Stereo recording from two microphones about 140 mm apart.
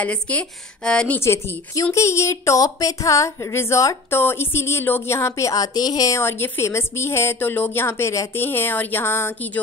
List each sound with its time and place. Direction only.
0.0 s a woman's voice: 10° left (ahead or behind)